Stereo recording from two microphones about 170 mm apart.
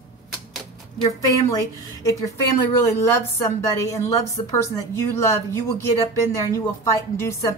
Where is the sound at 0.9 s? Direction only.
20° left (ahead or behind).